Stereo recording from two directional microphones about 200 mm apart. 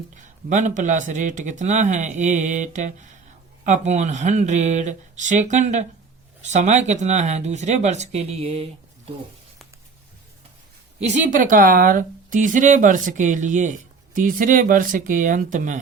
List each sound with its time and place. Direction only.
0.1 s speech: 40° right (ahead or behind)
11.0 s speech: 35° right (ahead or behind)